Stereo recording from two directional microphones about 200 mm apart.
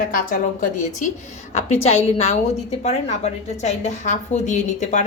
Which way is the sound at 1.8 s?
30° left (ahead or behind).